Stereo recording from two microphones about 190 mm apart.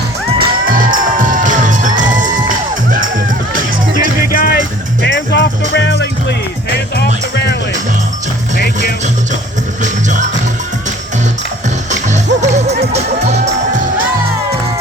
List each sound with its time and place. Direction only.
0.3 s music: 45° right (ahead or behind)
4.3 s music: 50° left (ahead or behind)
5.0 s music: 65° left (ahead or behind)
9.8 s music: 40° right (ahead or behind)
11.9 s music: 40° right (ahead or behind)